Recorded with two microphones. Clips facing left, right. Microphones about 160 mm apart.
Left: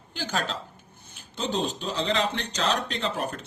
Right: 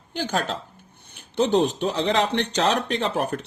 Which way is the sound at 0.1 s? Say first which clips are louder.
Right 4 dB; 50° right (ahead or behind).